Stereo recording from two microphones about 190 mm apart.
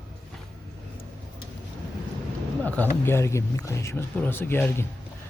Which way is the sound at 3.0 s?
15° left (ahead or behind).